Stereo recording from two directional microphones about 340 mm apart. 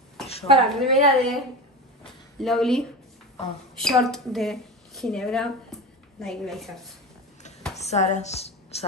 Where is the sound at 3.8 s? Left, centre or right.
Centre.